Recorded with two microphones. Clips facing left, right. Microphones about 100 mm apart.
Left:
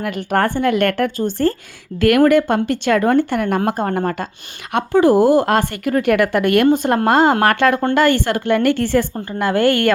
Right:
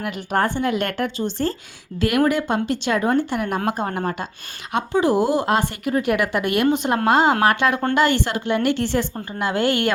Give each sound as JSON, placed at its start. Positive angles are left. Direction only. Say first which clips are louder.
{"t": 0.3, "sound": "speech", "louder": "left 4 dB", "side_deg": 55}